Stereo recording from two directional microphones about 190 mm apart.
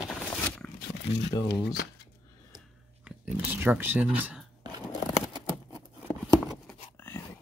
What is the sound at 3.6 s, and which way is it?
Speech, 10° right (ahead or behind).